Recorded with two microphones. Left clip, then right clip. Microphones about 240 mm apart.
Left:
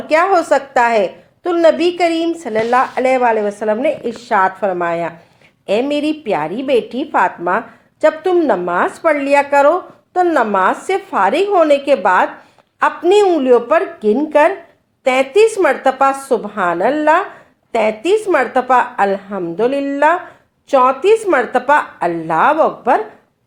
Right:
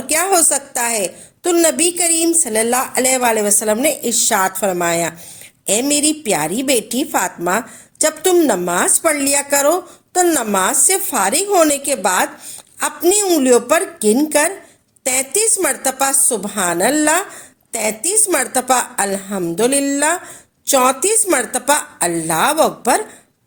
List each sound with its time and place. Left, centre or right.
0.1 s a woman's voice: right